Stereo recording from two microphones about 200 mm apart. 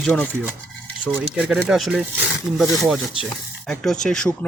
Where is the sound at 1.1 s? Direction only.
5° right (ahead or behind).